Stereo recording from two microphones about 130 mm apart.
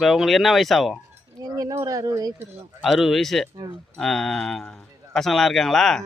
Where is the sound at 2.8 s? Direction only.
Centre (ahead or behind).